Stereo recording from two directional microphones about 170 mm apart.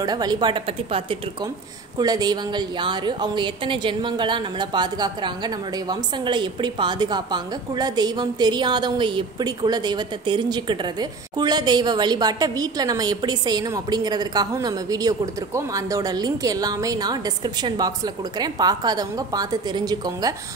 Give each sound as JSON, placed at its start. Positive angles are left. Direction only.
{"t": 0.0, "sound": "a woman's voice", "side_deg": -25}